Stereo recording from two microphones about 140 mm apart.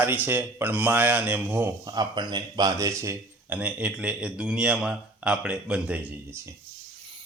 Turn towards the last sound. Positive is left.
turn(degrees=-10)  # may be behind; listen again after turning